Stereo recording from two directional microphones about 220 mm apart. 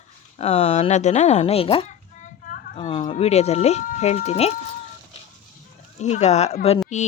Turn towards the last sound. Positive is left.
turn(degrees=35)  # may be behind; listen again after turning